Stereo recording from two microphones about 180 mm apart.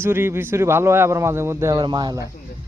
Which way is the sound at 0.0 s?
15° right (ahead or behind).